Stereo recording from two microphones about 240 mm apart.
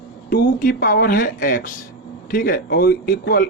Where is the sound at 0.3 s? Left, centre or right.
Left.